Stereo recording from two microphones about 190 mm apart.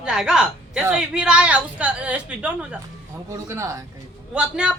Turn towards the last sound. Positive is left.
turn(degrees=-5)  # may be behind; listen again after turning